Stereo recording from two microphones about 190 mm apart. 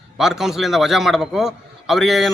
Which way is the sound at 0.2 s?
Centre (ahead or behind).